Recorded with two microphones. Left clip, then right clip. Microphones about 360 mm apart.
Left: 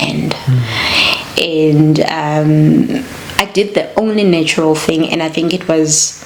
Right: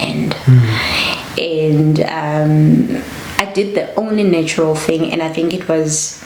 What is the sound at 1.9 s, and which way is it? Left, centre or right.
Speech, left.